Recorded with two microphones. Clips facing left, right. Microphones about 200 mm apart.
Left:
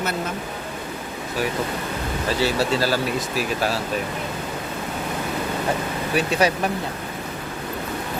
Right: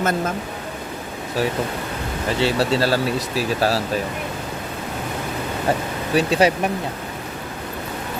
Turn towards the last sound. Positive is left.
turn(degrees=-30)  # may be behind; listen again after turning